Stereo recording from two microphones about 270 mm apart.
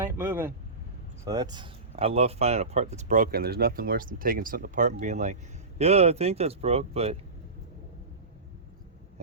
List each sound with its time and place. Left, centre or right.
0.0 s speech: centre